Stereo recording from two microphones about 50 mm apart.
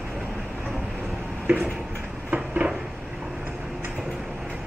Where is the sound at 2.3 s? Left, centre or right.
Right.